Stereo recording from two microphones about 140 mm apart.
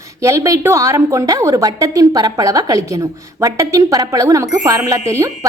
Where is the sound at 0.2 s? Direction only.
20° right (ahead or behind).